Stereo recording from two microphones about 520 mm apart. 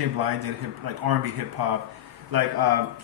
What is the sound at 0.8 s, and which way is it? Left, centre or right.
Speech, right.